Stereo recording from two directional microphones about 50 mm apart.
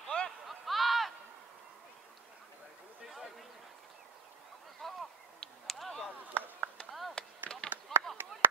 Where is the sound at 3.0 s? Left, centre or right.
Centre.